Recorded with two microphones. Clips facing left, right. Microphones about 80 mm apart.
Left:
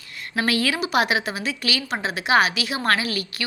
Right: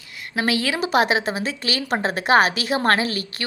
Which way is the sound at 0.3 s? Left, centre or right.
Right.